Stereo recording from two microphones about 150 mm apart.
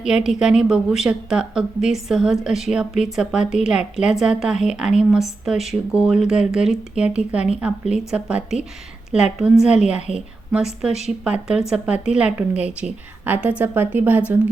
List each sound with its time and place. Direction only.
0.0 s a woman's voice: 5° right (ahead or behind)